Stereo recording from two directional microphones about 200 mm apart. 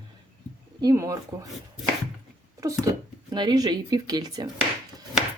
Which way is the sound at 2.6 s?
15° right (ahead or behind).